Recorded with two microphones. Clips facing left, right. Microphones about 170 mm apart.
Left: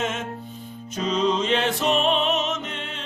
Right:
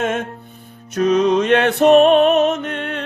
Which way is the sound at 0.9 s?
70° right (ahead or behind).